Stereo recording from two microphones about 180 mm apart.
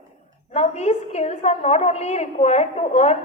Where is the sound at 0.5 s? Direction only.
35° left (ahead or behind).